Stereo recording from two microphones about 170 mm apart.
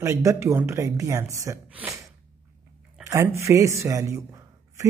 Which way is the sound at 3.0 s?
20° right (ahead or behind).